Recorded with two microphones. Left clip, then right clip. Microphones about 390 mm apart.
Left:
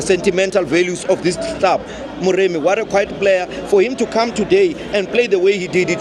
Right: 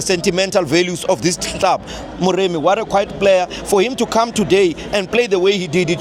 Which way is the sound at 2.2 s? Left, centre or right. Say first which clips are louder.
Even; right.